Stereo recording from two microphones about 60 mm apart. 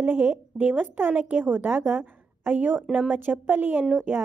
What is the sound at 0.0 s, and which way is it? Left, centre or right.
A woman's voice, right.